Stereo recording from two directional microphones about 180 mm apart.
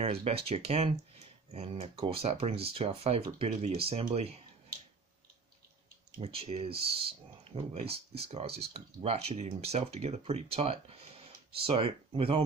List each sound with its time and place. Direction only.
0.0 s speech: 35° right (ahead or behind)
6.2 s speech: 35° right (ahead or behind)